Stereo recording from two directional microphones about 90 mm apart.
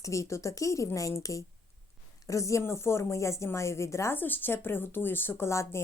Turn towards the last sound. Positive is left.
turn(degrees=30)  # may be behind; listen again after turning